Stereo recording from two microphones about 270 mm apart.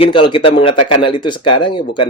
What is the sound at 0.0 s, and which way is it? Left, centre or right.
Speech, centre.